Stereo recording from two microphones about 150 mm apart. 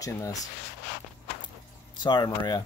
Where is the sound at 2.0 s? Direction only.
30° left (ahead or behind).